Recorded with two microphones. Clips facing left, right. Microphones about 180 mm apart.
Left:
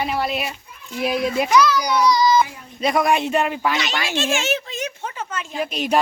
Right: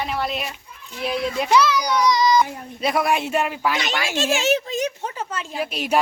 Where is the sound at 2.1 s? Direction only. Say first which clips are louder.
Left 1 dB; 20° right (ahead or behind).